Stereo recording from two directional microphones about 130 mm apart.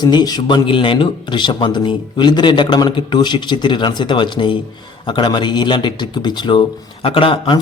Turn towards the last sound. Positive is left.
turn(degrees=40)  # may be behind; listen again after turning